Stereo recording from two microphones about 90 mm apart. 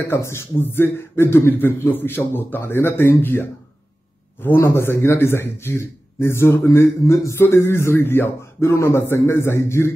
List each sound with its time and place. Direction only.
0.0 s speech: 30° left (ahead or behind)